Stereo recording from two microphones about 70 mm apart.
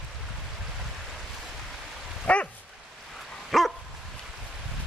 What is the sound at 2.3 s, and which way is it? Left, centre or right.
Dog, centre.